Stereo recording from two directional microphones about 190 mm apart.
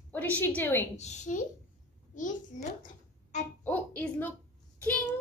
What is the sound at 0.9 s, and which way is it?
Speech, 35° left (ahead or behind).